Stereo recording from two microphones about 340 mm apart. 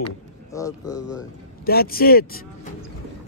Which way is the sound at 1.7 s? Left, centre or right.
Left.